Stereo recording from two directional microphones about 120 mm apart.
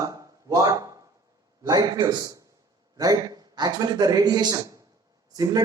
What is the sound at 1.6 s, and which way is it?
Speech, 35° right (ahead or behind).